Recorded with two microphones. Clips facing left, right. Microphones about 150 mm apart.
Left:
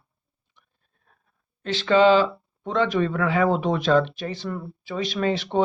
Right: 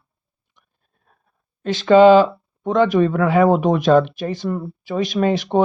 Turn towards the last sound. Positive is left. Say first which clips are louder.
# right 5 dB
turn(degrees=-45)  # may be behind; listen again after turning